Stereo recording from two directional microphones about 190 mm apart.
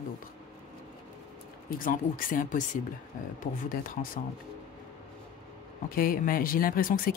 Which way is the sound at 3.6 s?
50° left (ahead or behind).